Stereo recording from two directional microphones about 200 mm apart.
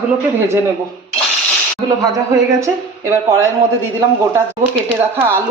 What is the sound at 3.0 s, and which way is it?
Speech, 15° right (ahead or behind).